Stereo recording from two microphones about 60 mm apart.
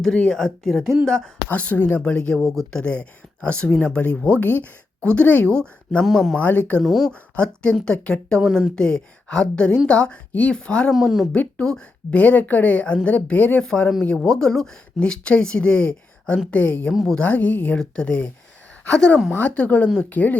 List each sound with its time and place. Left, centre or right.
0.0 s a woman's voice: centre
1.5 s a woman's voice: left
2.3 s a woman's voice: centre
2.8 s a woman's voice: centre
4.0 s a woman's voice: left
5.5 s a woman's voice: centre
6.1 s speech: centre
6.4 s a woman's voice: left
6.8 s speech: centre
7.1 s a woman's voice: centre
17.7 s a woman's voice: centre